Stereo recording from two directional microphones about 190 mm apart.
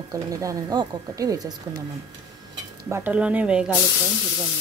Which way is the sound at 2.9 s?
10° right (ahead or behind).